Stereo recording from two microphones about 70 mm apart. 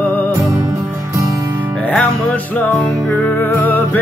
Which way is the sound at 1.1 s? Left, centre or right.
Right.